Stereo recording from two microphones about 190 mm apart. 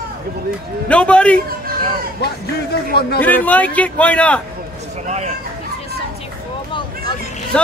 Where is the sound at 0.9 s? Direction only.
5° left (ahead or behind).